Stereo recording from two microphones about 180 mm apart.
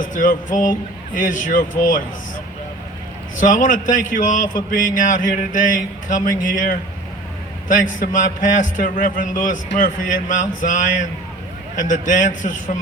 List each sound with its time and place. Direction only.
0.0 s a man's voice: 45° left (ahead or behind)
3.4 s a man's voice: 45° left (ahead or behind)
7.9 s a man's voice: 45° left (ahead or behind)